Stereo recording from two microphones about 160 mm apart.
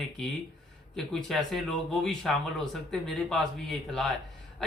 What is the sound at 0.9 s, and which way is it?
Speech, centre (ahead or behind).